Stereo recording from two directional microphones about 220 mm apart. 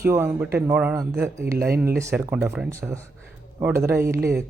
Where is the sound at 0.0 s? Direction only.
10° right (ahead or behind).